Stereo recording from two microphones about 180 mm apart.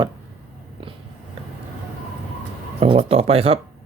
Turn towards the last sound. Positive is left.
turn(degrees=-35)  # may be behind; listen again after turning